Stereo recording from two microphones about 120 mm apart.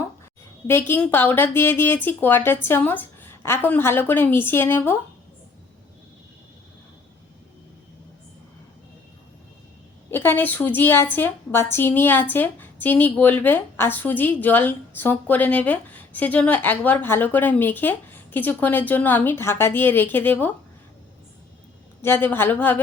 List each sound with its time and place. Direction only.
0.7 s a woman's voice: 20° left (ahead or behind)
10.1 s a woman's voice: 15° left (ahead or behind)
22.0 s a woman's voice: 20° left (ahead or behind)